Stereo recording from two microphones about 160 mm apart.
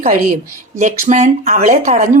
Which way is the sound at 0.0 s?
60° right (ahead or behind).